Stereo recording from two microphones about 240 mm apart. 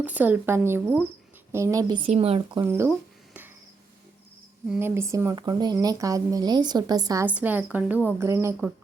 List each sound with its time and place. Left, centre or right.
0.0 s speech: centre; by 2.6 s right
2.6 s speech: centre
4.7 s speech: centre